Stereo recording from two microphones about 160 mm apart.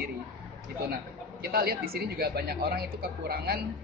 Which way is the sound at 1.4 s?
75° right (ahead or behind).